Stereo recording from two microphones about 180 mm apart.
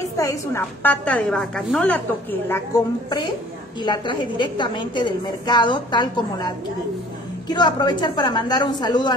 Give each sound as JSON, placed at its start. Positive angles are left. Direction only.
{"t": 0.2, "sound": "a woman's voice", "side_deg": 15}